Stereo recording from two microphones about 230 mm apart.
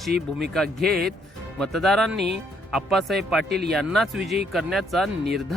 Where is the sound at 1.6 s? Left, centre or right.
Centre.